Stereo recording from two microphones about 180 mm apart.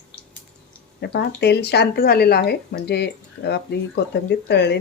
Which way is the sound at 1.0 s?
65° left (ahead or behind).